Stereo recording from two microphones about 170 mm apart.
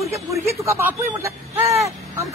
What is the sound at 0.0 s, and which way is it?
A woman's voice, 20° right (ahead or behind).